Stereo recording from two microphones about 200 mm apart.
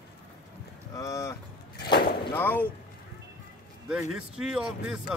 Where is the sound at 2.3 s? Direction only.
10° left (ahead or behind).